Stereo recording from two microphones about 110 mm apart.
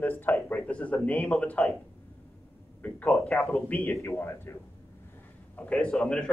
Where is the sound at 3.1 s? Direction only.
Centre (ahead or behind).